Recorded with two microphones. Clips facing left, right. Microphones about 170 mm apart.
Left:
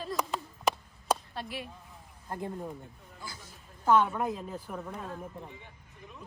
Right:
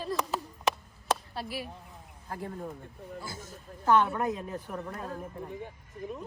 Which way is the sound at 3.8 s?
Centre (ahead or behind).